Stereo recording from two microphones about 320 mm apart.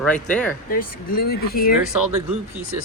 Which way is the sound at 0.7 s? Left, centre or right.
Left.